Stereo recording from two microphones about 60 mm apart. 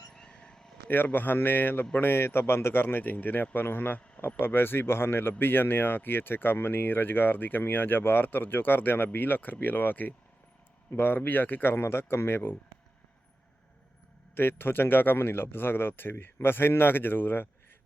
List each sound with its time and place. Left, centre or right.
0.1 s vehicle: centre
0.9 s speech: left
14.3 s speech: left